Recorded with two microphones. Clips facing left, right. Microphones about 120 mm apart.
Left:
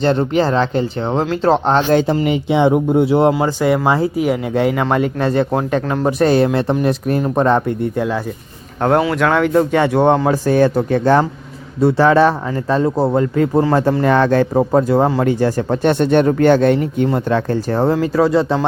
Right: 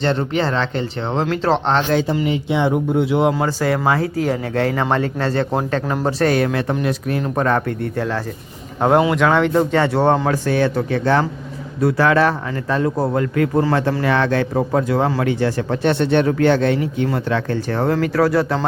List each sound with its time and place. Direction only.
0.3 s speech: 5° left (ahead or behind)
1.9 s speech: 50° left (ahead or behind)
2.9 s speech: 40° left (ahead or behind)
3.3 s speech: 15° left (ahead or behind)
6.3 s speech: 30° left (ahead or behind)
7.3 s speech: 20° left (ahead or behind)
8.8 s speech: 5° right (ahead or behind); by 10.2 s 10° left (ahead or behind)
10.3 s speech: 40° left (ahead or behind)
11.8 s speech: 25° left (ahead or behind)
13.7 s speech: 40° left (ahead or behind); by 15.2 s 25° left (ahead or behind)
15.2 s speech: 40° left (ahead or behind)
17.2 s speech: 35° left (ahead or behind)